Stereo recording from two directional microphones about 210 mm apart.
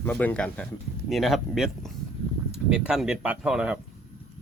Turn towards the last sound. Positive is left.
turn(degrees=-5)  # may be behind; listen again after turning